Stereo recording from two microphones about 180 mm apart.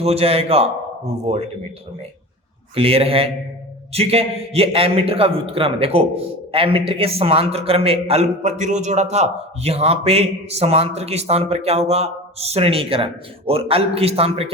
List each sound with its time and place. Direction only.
0.0 s a man's voice: 35° right (ahead or behind)
2.7 s a man's voice: 35° right (ahead or behind)